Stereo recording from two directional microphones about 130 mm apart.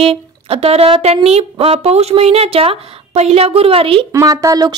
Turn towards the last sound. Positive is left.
turn(degrees=-30)  # may be behind; listen again after turning